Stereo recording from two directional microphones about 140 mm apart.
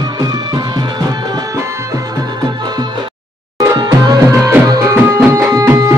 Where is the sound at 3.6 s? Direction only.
25° right (ahead or behind).